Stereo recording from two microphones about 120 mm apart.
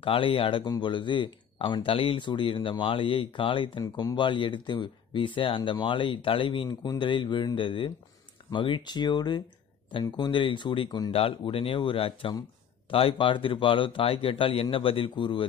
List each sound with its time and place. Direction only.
0.0 s speech: 50° left (ahead or behind)